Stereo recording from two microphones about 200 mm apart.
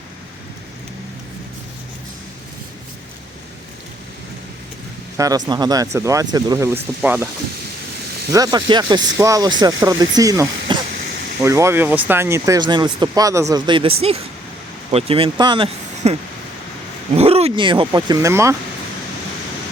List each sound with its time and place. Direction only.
5.1 s speech: 15° right (ahead or behind)
8.3 s speech: 20° right (ahead or behind)
17.2 s speech: 30° right (ahead or behind); by 18.5 s 15° right (ahead or behind)